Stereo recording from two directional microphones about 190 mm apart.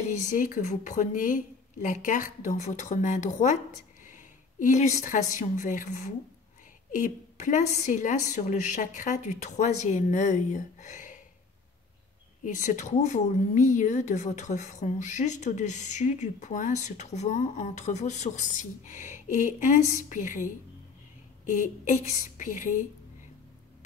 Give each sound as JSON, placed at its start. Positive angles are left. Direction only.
{"t": 0.1, "sound": "a woman's voice", "side_deg": 40}
{"t": 12.4, "sound": "a woman's voice", "side_deg": 40}